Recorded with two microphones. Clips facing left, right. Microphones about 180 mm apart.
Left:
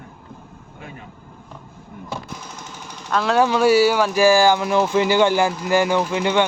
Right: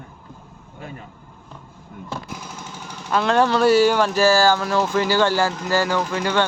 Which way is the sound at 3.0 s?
Centre (ahead or behind).